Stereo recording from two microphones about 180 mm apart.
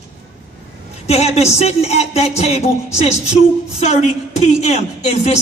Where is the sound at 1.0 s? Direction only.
35° left (ahead or behind).